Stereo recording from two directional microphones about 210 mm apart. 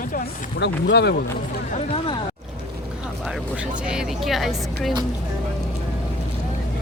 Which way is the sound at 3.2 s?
5° right (ahead or behind).